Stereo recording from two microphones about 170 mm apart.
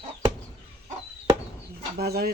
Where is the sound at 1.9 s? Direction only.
65° right (ahead or behind).